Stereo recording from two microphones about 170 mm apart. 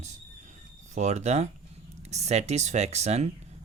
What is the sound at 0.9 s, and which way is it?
Speech, 45° right (ahead or behind).